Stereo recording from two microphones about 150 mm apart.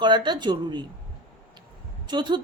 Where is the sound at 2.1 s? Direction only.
30° right (ahead or behind).